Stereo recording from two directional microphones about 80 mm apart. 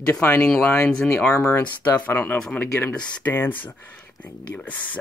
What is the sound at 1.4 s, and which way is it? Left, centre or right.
Speech, left.